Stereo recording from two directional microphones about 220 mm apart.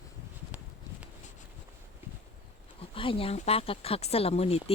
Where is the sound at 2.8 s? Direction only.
25° left (ahead or behind).